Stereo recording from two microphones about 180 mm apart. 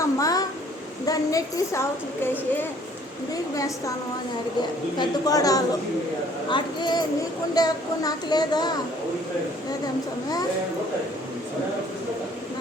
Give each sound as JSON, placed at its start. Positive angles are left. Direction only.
{"t": 0.0, "sound": "a sound", "side_deg": 20}
{"t": 1.0, "sound": "a woman's voice", "side_deg": 20}
{"t": 4.9, "sound": "speech", "side_deg": 20}